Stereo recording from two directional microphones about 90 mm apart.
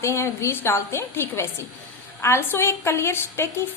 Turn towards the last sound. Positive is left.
turn(degrees=25)  # may be behind; listen again after turning